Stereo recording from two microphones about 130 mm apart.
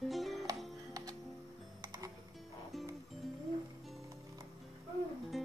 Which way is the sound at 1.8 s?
25° right (ahead or behind).